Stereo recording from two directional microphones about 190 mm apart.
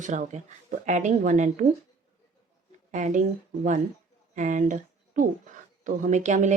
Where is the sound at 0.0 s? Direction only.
40° right (ahead or behind).